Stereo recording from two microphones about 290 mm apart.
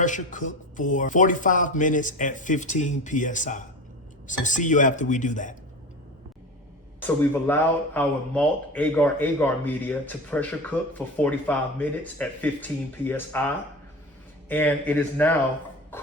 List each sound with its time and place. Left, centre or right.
0.0 s speech: left
7.4 s speech: centre